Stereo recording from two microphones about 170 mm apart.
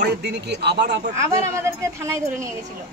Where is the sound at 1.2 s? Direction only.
15° right (ahead or behind).